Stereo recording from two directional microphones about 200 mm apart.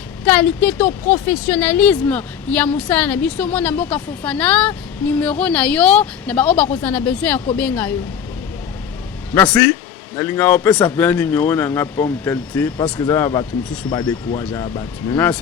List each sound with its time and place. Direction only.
0.3 s a woman's voice: 5° left (ahead or behind)
10.2 s a woman's voice: 10° left (ahead or behind)
12.7 s a woman's voice: 20° left (ahead or behind)